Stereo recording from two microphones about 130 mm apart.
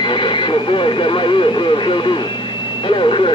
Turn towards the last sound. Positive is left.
turn(degrees=40)  # may be behind; listen again after turning